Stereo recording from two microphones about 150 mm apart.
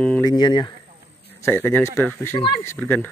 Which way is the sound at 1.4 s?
15° left (ahead or behind).